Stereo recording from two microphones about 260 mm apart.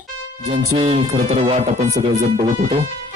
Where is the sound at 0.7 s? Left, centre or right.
Right.